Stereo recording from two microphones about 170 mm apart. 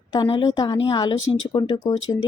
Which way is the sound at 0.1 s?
30° left (ahead or behind).